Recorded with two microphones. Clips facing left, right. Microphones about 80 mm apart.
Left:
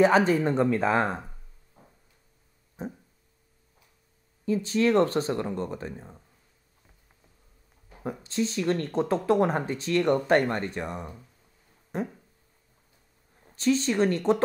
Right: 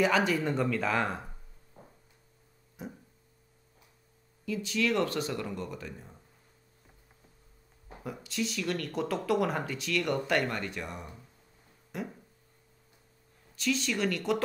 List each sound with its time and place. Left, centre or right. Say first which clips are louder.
0.0 s speech: left 6 dB; left
2.8 s a sound: left 6 dB; left
4.5 s speech: left 6 dB; left
8.0 s speech: left 6 dB; left
13.4 s a woman's voice: left 7 dB; left